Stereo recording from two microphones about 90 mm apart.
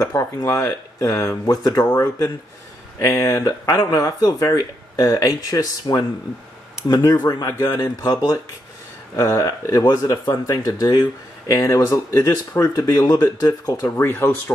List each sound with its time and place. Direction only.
0.0 s speech: 35° left (ahead or behind)
1.5 s speech: 45° left (ahead or behind)
13.9 s speech: 25° left (ahead or behind)